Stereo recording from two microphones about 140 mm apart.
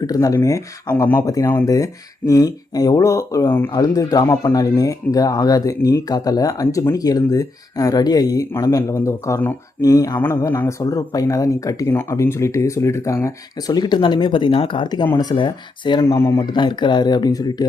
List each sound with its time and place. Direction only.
0.0 s speech: 25° left (ahead or behind)
1.3 s speech: 25° left (ahead or behind)
3.7 s speech: 25° left (ahead or behind)
16.0 s speech: 20° left (ahead or behind)
16.5 s speech: 35° left (ahead or behind)